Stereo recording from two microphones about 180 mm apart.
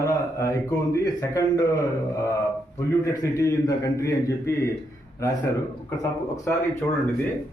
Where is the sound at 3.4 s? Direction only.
15° left (ahead or behind).